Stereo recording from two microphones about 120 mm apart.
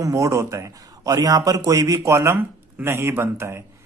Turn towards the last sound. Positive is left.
turn(degrees=-20)  # may be behind; listen again after turning